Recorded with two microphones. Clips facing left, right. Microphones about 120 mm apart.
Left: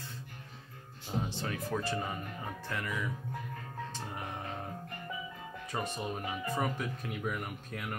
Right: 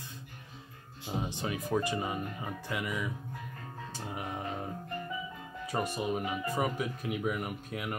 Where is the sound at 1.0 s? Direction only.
15° right (ahead or behind).